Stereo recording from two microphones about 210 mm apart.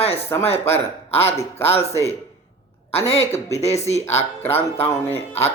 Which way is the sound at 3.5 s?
30° left (ahead or behind).